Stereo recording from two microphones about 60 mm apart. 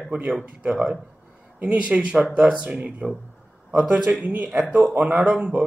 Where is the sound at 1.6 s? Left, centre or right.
Right.